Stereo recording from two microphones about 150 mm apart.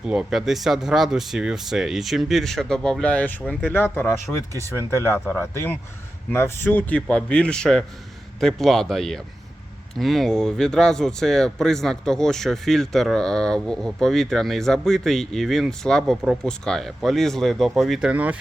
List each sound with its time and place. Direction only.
0.0 s a man's voice: 5° right (ahead or behind)